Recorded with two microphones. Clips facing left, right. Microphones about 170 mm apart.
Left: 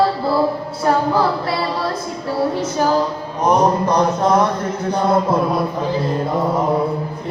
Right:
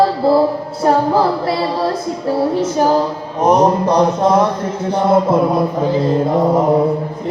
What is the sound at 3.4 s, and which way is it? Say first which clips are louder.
Mantra: right 3 dB; 20° right (ahead or behind).